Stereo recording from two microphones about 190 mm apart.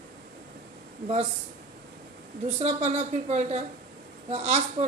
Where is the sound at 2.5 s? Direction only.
35° right (ahead or behind).